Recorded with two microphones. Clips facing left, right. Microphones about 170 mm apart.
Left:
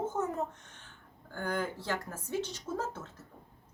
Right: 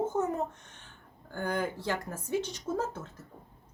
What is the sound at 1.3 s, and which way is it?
Speech, 15° right (ahead or behind).